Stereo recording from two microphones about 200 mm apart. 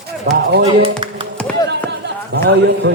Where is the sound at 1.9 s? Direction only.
60° right (ahead or behind).